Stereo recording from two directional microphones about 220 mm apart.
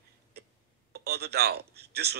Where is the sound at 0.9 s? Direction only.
45° right (ahead or behind).